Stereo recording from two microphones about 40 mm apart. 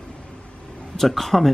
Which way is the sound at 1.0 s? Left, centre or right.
Centre.